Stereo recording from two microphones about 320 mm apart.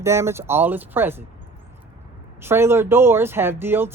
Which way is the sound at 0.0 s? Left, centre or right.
Centre.